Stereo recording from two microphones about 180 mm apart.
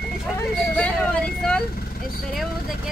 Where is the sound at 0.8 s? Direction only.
5° left (ahead or behind).